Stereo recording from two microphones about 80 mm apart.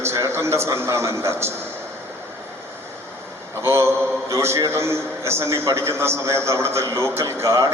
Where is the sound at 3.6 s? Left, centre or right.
Right.